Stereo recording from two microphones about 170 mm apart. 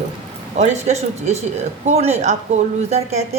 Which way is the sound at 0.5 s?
45° right (ahead or behind).